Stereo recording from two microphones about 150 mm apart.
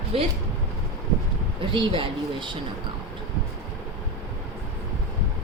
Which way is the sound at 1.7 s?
35° right (ahead or behind).